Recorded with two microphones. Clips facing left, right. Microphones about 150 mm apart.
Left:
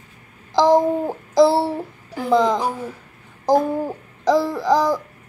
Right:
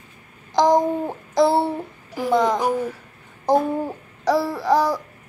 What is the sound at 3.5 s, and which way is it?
Babbling, centre (ahead or behind).